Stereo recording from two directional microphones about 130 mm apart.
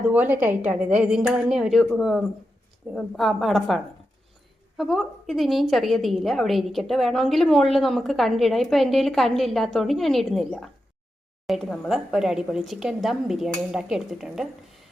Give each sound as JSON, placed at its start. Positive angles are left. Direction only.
{"t": 0.1, "sound": "a woman's voice", "side_deg": -15}
{"t": 4.8, "sound": "a woman's voice", "side_deg": 0}